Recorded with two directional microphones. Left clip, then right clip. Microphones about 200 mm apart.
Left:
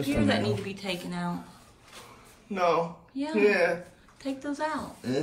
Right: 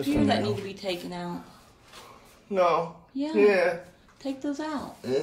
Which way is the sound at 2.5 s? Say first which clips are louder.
Right 3 dB; 55° right (ahead or behind).